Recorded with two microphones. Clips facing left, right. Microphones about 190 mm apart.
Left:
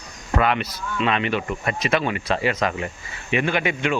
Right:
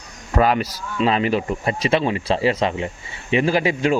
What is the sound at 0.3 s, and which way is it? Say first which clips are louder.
Speech: right 3 dB; 35° right (ahead or behind).